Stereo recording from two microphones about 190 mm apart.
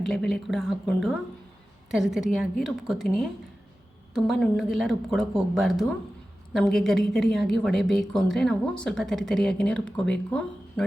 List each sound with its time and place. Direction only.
0.0 s speech: centre (ahead or behind)